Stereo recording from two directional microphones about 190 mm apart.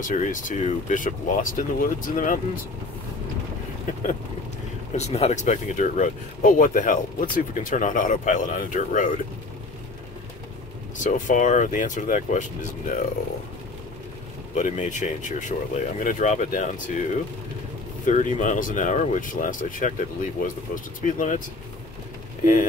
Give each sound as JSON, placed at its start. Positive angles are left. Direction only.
{"t": 0.0, "sound": "speech", "side_deg": 40}
{"t": 4.9, "sound": "speech", "side_deg": 35}
{"t": 11.1, "sound": "speech", "side_deg": 40}
{"t": 14.5, "sound": "speech", "side_deg": 40}
{"t": 18.0, "sound": "speech", "side_deg": 40}